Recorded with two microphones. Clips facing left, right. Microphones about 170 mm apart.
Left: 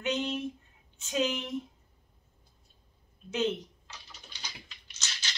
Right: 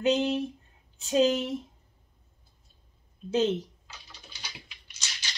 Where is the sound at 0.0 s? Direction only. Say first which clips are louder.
Right 6 dB; 35° right (ahead or behind).